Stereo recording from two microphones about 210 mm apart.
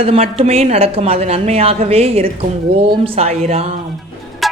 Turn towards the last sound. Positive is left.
turn(degrees=0)  # may be behind; listen again after turning